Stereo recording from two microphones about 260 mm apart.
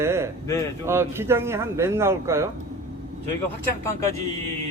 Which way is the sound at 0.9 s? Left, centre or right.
Centre.